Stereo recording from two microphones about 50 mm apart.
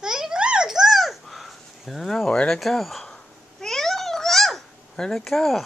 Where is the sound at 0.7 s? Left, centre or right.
Centre.